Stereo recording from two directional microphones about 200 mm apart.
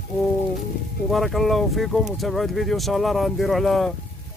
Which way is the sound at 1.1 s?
Centre (ahead or behind).